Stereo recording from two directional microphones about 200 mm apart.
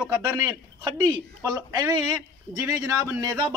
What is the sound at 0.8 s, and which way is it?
A man's voice, 20° right (ahead or behind).